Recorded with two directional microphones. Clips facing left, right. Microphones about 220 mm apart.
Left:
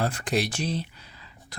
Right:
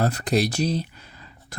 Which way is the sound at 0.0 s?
40° right (ahead or behind).